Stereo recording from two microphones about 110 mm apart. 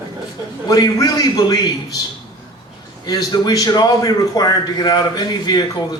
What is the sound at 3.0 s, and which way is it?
A man's voice, 40° left (ahead or behind).